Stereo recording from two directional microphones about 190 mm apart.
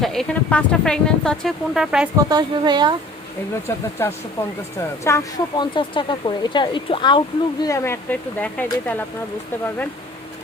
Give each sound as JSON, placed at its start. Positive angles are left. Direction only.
{"t": 0.0, "sound": "speech", "side_deg": 0}
{"t": 2.1, "sound": "speech", "side_deg": -20}
{"t": 3.7, "sound": "speech", "side_deg": 15}
{"t": 5.0, "sound": "speech", "side_deg": 15}
{"t": 5.7, "sound": "speech", "side_deg": 25}
{"t": 7.6, "sound": "speech", "side_deg": 15}